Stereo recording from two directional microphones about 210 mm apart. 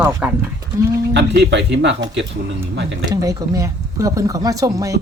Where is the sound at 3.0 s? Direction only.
15° right (ahead or behind).